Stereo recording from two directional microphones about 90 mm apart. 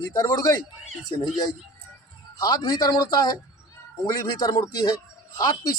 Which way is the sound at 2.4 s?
45° left (ahead or behind).